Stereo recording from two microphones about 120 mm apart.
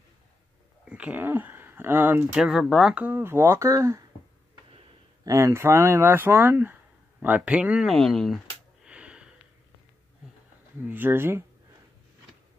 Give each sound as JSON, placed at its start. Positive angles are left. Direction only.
{"t": 0.8, "sound": "speech", "side_deg": -10}
{"t": 2.3, "sound": "speech", "side_deg": -5}
{"t": 3.0, "sound": "speech", "side_deg": -15}
{"t": 5.2, "sound": "speech", "side_deg": -25}
{"t": 7.9, "sound": "speech", "side_deg": 0}
{"t": 8.8, "sound": "a sound", "side_deg": -10}
{"t": 10.9, "sound": "speech", "side_deg": -15}